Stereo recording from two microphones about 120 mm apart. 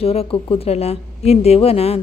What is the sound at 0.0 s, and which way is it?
A woman's voice, 55° left (ahead or behind).